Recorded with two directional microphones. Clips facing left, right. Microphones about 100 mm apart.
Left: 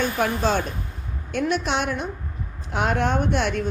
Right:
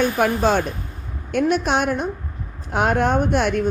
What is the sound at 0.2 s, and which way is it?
A woman's voice, 50° right (ahead or behind).